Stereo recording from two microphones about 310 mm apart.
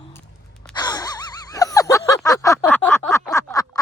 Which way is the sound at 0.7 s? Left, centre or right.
Centre.